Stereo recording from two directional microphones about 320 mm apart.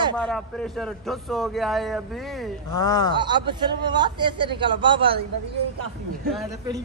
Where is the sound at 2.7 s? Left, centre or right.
Centre.